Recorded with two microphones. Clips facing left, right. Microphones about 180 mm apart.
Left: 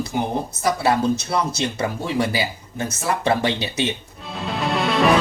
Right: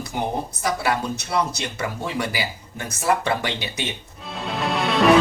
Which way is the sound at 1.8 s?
25° left (ahead or behind).